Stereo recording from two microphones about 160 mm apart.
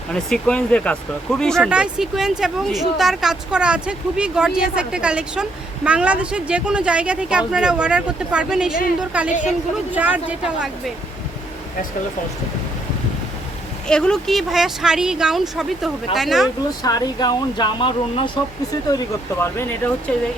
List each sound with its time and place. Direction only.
0.1 s a woman's voice: 5° left (ahead or behind)
13.8 s speech: 5° left (ahead or behind)
16.8 s speech: 25° left (ahead or behind); by 20.2 s 10° left (ahead or behind)